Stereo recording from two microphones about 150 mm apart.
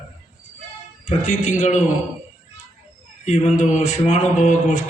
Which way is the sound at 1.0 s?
55° left (ahead or behind).